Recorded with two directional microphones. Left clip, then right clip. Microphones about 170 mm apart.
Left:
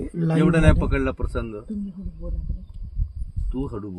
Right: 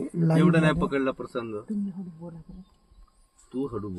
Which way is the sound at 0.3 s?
65° left (ahead or behind).